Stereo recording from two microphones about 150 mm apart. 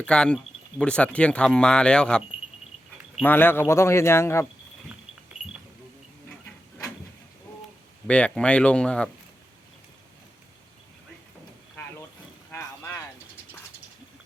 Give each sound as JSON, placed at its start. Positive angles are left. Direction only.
{"t": 0.0, "sound": "speech", "side_deg": 5}
{"t": 3.2, "sound": "speech", "side_deg": 15}
{"t": 8.0, "sound": "speech", "side_deg": 5}
{"t": 12.5, "sound": "vehicle", "side_deg": 20}